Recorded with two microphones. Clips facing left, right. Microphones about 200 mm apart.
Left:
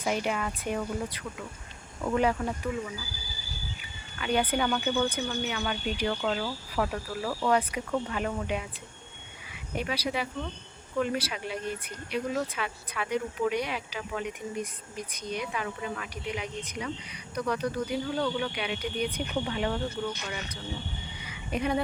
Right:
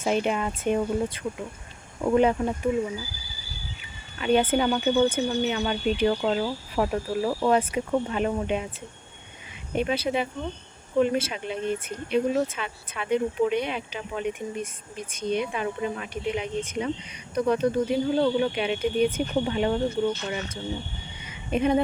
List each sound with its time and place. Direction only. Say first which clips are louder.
0.0 s speech: right 5 dB; 25° right (ahead or behind)
4.2 s speech: right 6 dB; 25° right (ahead or behind)
9.7 s speech: right 6 dB; 25° right (ahead or behind)
21.2 s a sound: right 6 dB; 25° right (ahead or behind)